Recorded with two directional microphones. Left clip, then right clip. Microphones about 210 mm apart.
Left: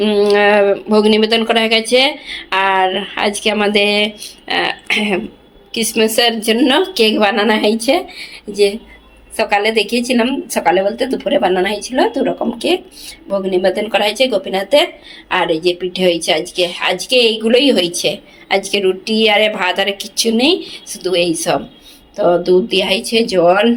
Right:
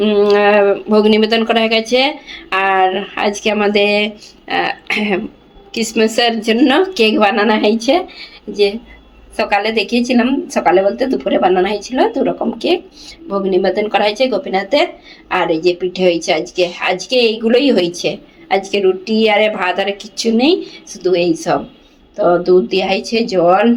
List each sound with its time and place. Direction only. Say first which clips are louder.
0.0 s a woman's voice: right 1 dB; centre (ahead or behind)